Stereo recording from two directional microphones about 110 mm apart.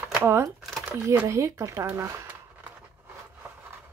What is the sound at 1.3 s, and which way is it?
Speech, 30° right (ahead or behind).